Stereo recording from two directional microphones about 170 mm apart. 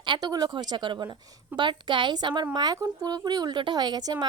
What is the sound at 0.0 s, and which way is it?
A woman's voice, 25° right (ahead or behind).